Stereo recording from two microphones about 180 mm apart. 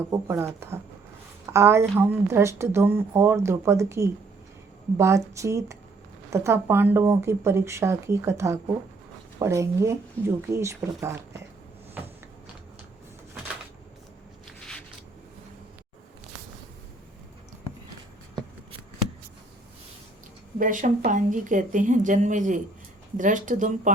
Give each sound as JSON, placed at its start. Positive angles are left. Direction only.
{"t": 0.1, "sound": "speech", "side_deg": -15}
{"t": 14.6, "sound": "a sound", "side_deg": 5}
{"t": 20.6, "sound": "a woman's voice", "side_deg": -45}